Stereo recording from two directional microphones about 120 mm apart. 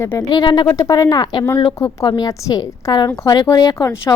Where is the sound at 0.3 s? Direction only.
35° left (ahead or behind).